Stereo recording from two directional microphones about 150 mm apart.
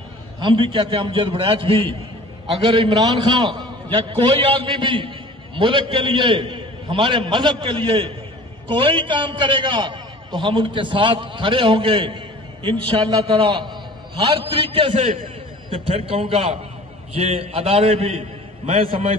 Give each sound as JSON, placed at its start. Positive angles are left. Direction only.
{"t": 0.4, "sound": "a man's voice", "side_deg": -30}